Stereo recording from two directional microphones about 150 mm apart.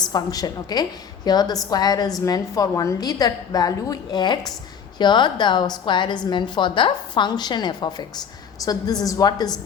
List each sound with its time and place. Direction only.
0.0 s a woman's voice: 25° left (ahead or behind)